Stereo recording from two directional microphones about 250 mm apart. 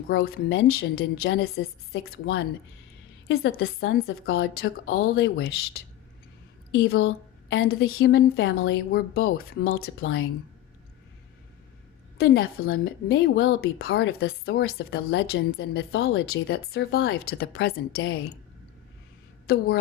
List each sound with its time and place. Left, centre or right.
0.1 s a woman's voice: left
6.8 s a woman's voice: left
7.5 s a woman's voice: left
12.1 s a woman's voice: left
19.5 s a woman's voice: left